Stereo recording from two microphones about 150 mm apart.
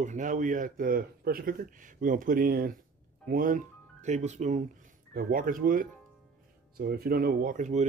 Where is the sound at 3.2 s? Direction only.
70° right (ahead or behind); by 4.6 s 50° right (ahead or behind).